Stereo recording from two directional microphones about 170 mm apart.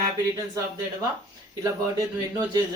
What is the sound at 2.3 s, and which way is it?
Speech, 15° right (ahead or behind).